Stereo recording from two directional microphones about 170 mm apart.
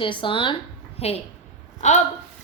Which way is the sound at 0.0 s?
30° left (ahead or behind).